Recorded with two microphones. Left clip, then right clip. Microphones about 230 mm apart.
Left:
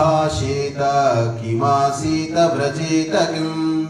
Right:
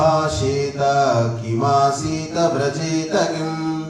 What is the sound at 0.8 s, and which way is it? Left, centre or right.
Mantra, left.